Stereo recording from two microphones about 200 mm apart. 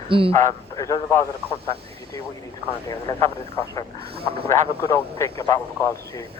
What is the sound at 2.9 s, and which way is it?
Speech, 20° left (ahead or behind).